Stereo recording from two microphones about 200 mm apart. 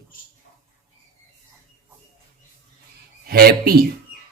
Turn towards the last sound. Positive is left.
turn(degrees=-50)  # may be behind; listen again after turning